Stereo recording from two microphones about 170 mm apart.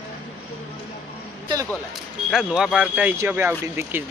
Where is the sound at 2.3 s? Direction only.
5° right (ahead or behind).